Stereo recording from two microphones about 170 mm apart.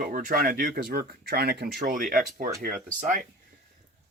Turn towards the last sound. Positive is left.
turn(degrees=-50)  # may be behind; listen again after turning